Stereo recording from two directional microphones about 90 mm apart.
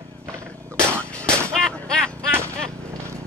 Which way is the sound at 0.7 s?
30° right (ahead or behind).